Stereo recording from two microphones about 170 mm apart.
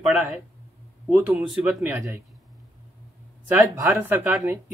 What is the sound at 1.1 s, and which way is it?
Speech, 10° right (ahead or behind).